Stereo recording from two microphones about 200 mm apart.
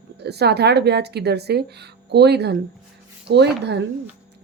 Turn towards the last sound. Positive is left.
turn(degrees=-55)  # may be behind; listen again after turning